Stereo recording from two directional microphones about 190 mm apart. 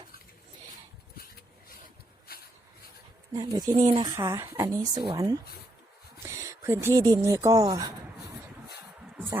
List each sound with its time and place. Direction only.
3.3 s speech: 20° right (ahead or behind)
3.7 s speech: 30° right (ahead or behind)
4.1 s speech: 15° right (ahead or behind)